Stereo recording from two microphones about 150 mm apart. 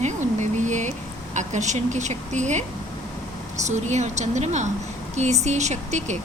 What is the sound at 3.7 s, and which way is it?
A woman's voice, 50° right (ahead or behind).